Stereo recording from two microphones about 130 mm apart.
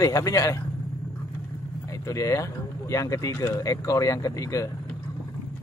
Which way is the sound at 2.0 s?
25° left (ahead or behind).